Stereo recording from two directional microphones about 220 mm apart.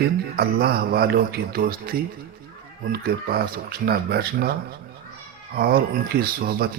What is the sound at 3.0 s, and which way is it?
Speech, 40° right (ahead or behind).